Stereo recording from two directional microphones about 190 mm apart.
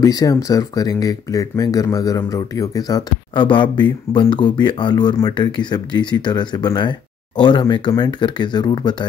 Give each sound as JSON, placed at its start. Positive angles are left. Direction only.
{"t": 0.0, "sound": "speech", "side_deg": 20}